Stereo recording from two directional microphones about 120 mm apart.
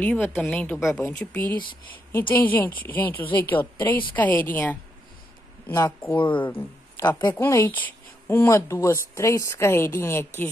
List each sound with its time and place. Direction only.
0.0 s a woman's voice: 15° left (ahead or behind)
6.1 s speech: 40° left (ahead or behind)
6.4 s speech: 20° left (ahead or behind)